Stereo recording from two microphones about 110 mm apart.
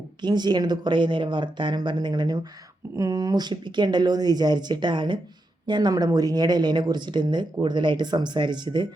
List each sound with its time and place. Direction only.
0.2 s speech: 40° right (ahead or behind)